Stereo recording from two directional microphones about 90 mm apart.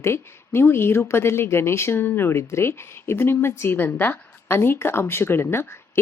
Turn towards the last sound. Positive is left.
turn(degrees=25)  # may be behind; listen again after turning